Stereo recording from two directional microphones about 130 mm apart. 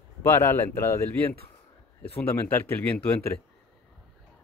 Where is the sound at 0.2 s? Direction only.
20° left (ahead or behind).